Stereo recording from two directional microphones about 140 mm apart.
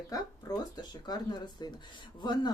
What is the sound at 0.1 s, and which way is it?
Speech, 25° left (ahead or behind).